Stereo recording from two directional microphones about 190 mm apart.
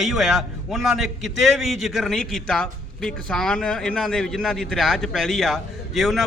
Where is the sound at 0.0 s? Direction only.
Centre (ahead or behind).